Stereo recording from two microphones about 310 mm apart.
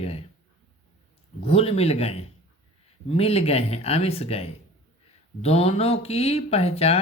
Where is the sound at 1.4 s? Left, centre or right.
Centre.